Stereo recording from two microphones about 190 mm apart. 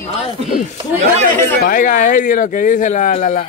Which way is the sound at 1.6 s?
45° left (ahead or behind).